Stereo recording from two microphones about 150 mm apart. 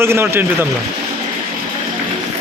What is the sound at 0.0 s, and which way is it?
Speech, 15° right (ahead or behind).